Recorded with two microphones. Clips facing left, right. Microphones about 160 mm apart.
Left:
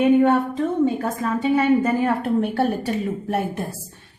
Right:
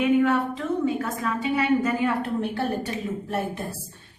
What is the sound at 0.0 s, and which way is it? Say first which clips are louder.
A woman's voice: left 4 dB; 35° left (ahead or behind).